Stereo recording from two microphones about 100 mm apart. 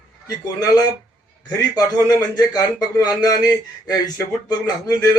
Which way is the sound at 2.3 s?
40° left (ahead or behind).